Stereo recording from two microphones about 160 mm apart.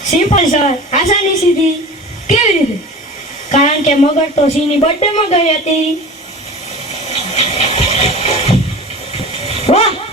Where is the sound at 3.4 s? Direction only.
50° left (ahead or behind).